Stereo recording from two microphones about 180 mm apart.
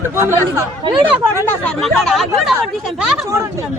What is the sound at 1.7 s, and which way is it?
Speech, centre (ahead or behind).